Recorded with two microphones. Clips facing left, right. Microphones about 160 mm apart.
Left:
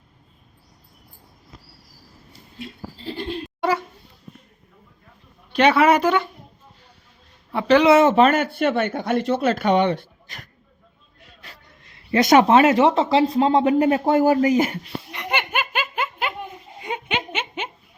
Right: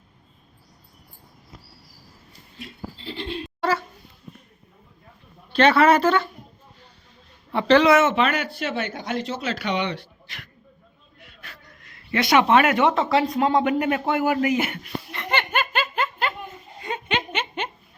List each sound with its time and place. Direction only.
3.0 s speech: 45° left (ahead or behind)
3.6 s a sound: 15° left (ahead or behind)
5.5 s speech: 15° left (ahead or behind)
7.5 s speech: 10° left (ahead or behind)
7.9 s speech: 35° left (ahead or behind)
11.3 s a sound: 30° left (ahead or behind)
12.2 s speech: 45° left (ahead or behind)
12.5 s speech: 30° left (ahead or behind)
15.1 s laughter: 15° left (ahead or behind)
16.8 s a sound: 10° left (ahead or behind)